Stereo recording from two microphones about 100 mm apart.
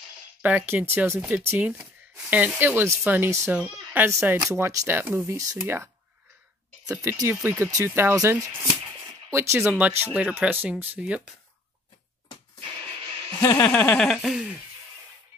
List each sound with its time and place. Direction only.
0.4 s speech: 20° right (ahead or behind)
1.7 s speech: 15° right (ahead or behind); by 5.9 s 30° right (ahead or behind)
7.0 s speech: 30° right (ahead or behind); by 11.3 s 10° right (ahead or behind)
13.4 s speech: 35° left (ahead or behind)
13.9 s speech: 10° left (ahead or behind)